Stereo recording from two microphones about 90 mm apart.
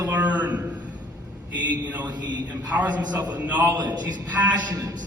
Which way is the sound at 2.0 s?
50° right (ahead or behind).